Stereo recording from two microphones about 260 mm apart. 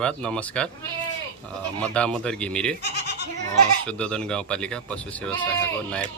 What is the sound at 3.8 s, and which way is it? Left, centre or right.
Speech, centre.